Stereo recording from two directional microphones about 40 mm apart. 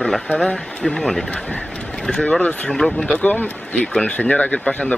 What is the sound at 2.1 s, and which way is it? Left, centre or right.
Speech, left.